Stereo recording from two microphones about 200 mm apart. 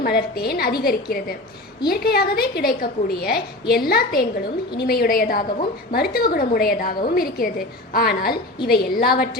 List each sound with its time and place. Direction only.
0.0 s a woman's voice: 50° left (ahead or behind)